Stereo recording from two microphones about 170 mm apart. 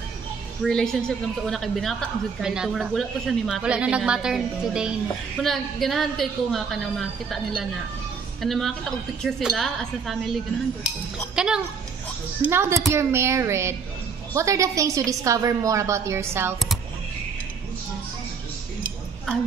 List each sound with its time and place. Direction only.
0.7 s a woman's voice: 5° left (ahead or behind)
11.3 s a woman's voice: 5° right (ahead or behind)